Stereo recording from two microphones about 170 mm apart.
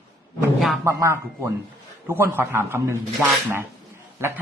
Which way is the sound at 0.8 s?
15° right (ahead or behind).